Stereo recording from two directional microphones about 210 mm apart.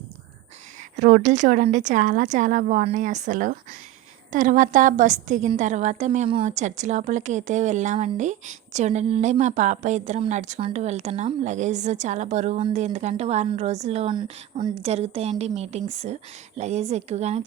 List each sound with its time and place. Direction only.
0.9 s a woman's voice: 40° right (ahead or behind)